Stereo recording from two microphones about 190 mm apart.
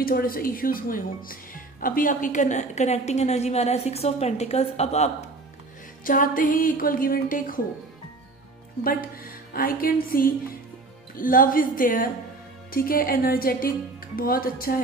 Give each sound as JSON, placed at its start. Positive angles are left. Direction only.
{"t": 0.0, "sound": "speech", "side_deg": 50}
{"t": 6.0, "sound": "speech", "side_deg": 45}
{"t": 8.8, "sound": "speech", "side_deg": 50}